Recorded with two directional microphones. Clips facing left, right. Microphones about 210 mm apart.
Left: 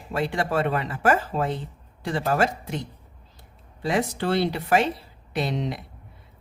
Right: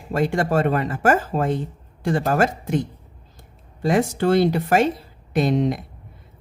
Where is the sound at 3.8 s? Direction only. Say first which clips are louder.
Right 5 dB; 45° right (ahead or behind).